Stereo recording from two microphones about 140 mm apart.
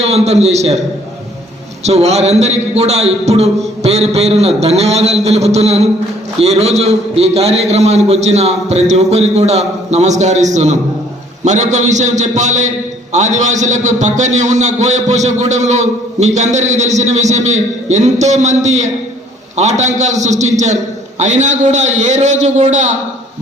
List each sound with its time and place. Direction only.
0.0 s a man's voice: 50° right (ahead or behind)
1.8 s a man's voice: 50° right (ahead or behind)